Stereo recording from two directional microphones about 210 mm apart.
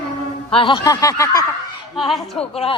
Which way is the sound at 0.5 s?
25° left (ahead or behind).